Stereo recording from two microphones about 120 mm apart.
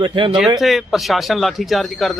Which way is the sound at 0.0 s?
45° right (ahead or behind).